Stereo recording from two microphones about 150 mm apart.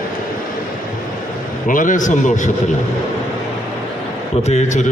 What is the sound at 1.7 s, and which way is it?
Speech, 60° left (ahead or behind).